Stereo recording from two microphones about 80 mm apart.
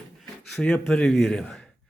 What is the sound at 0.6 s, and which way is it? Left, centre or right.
A man's voice, centre.